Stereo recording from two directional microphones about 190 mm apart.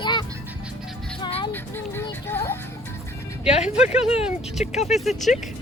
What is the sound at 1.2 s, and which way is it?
Vehicle, 30° left (ahead or behind).